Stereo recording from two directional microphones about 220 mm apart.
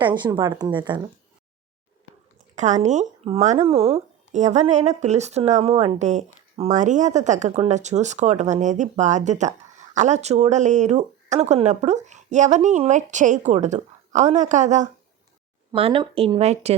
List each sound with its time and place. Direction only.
0.0 s speech: 20° right (ahead or behind)
2.6 s speech: 30° right (ahead or behind)